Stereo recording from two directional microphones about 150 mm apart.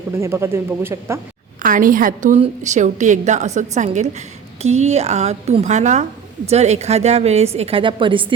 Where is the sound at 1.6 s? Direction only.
65° right (ahead or behind).